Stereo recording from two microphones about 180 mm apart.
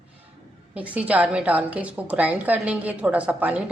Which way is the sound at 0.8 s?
10° right (ahead or behind).